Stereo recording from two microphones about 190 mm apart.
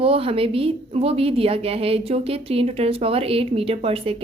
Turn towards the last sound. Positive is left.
turn(degrees=-30)  # may be behind; listen again after turning